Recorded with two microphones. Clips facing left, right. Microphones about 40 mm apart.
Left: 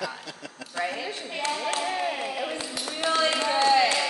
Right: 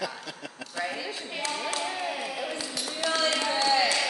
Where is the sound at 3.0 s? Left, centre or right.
Left.